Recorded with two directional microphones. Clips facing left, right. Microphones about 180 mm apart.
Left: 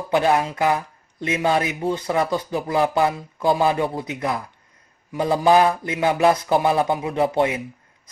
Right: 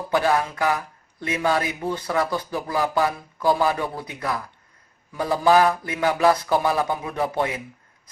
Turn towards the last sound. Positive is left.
turn(degrees=20)  # may be behind; listen again after turning